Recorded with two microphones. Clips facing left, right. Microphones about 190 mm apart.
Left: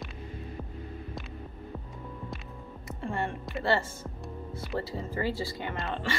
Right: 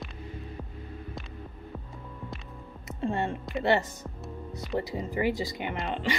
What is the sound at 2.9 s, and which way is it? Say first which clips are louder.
Music: right 3 dB; 20° right (ahead or behind).